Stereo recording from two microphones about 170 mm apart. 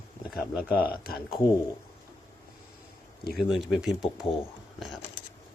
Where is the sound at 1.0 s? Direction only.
60° left (ahead or behind).